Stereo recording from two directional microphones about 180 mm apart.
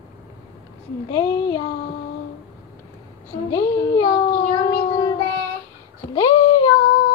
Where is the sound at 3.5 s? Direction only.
20° left (ahead or behind).